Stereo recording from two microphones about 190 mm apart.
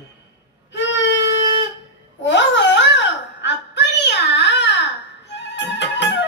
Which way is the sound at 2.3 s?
70° left (ahead or behind).